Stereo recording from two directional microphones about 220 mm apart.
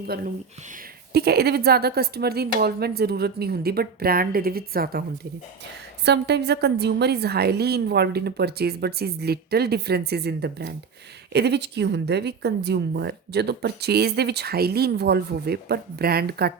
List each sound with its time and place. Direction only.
0.1 s a woman's voice: 45° right (ahead or behind)
6.1 s a woman's voice: 50° right (ahead or behind)